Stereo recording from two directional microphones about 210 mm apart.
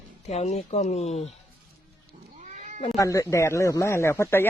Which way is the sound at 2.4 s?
35° right (ahead or behind).